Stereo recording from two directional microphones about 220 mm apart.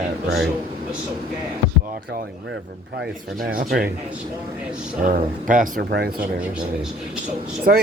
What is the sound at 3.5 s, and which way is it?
Speech, 40° right (ahead or behind).